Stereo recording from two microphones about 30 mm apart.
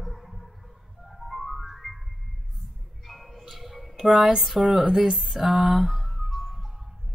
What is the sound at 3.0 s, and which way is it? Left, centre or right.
Music, centre.